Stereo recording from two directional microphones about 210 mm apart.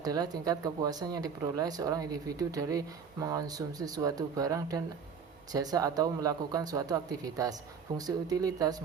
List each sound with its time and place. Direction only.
0.0 s speech: 20° right (ahead or behind)